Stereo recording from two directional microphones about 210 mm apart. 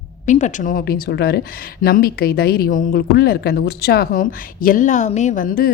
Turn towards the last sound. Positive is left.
turn(degrees=45)  # may be behind; listen again after turning